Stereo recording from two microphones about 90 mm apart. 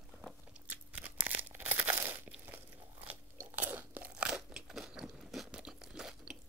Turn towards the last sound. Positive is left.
turn(degrees=-5)  # may be behind; listen again after turning